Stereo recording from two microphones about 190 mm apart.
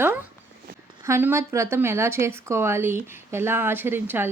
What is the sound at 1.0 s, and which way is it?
Speech, 15° right (ahead or behind).